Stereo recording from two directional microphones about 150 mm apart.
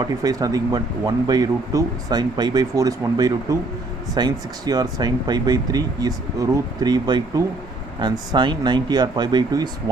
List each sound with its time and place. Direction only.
0.2 s speech: 25° right (ahead or behind)